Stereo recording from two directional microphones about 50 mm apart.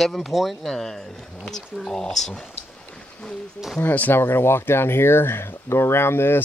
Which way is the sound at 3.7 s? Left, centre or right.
Left.